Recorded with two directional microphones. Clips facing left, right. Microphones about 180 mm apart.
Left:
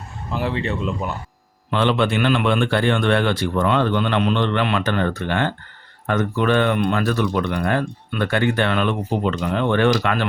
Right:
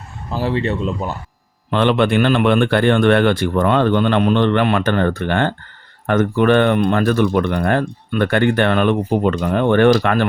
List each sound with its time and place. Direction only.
0.3 s speech: 35° right (ahead or behind)
1.7 s speech: 55° right (ahead or behind)